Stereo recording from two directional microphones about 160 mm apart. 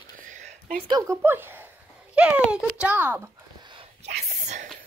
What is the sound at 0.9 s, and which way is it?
Speech, 20° right (ahead or behind).